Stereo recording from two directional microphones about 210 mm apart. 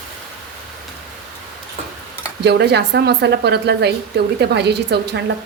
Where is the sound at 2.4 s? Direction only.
55° right (ahead or behind).